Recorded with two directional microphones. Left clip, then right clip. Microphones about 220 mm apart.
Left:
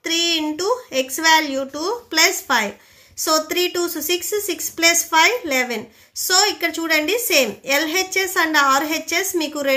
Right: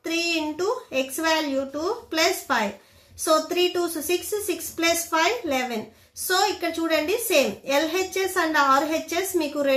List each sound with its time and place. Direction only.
0.0 s a woman's voice: 35° left (ahead or behind)